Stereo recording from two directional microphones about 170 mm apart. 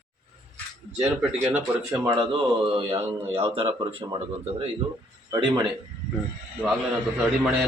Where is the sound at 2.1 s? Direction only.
30° right (ahead or behind).